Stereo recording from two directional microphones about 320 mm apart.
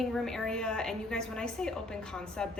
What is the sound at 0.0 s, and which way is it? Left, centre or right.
A woman's voice, centre.